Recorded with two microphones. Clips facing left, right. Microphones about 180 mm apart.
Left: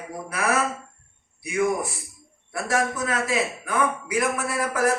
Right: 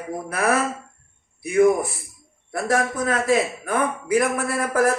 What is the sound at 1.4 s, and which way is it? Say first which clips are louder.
A man's voice: right 7 dB; 50° right (ahead or behind).